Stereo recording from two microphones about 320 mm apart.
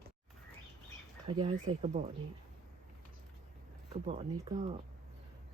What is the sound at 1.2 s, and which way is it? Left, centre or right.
Speech, centre.